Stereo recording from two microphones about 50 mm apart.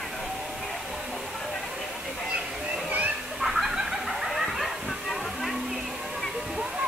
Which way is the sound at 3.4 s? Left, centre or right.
Centre.